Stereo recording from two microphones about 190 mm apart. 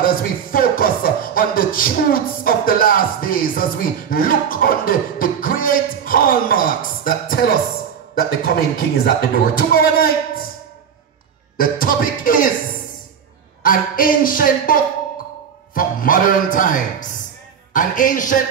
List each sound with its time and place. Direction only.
0.0 s speech: 50° left (ahead or behind)
11.5 s speech: 50° left (ahead or behind)
13.6 s speech: 50° left (ahead or behind)